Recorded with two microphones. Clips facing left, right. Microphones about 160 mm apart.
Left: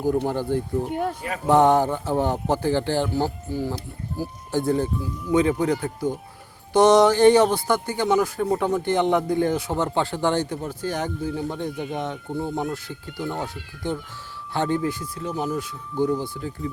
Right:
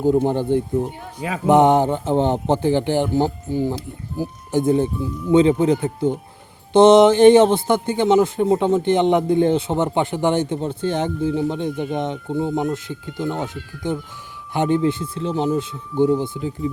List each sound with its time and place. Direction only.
0.0 s speech: 20° right (ahead or behind)